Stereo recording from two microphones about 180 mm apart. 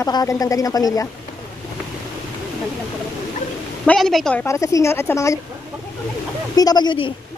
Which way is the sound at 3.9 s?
Centre (ahead or behind).